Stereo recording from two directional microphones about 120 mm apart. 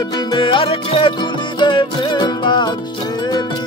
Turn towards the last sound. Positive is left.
turn(degrees=35)  # may be behind; listen again after turning